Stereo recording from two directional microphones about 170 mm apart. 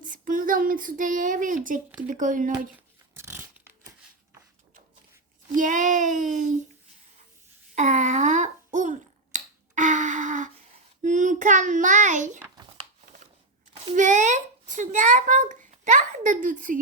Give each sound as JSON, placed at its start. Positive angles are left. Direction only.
{"t": 0.0, "sound": "speech", "side_deg": -50}
{"t": 3.2, "sound": "a sound", "side_deg": -15}
{"t": 5.5, "sound": "speech", "side_deg": -50}
{"t": 7.8, "sound": "finger snapping", "side_deg": -45}
{"t": 11.0, "sound": "child singing", "side_deg": -45}
{"t": 13.9, "sound": "speech", "side_deg": -45}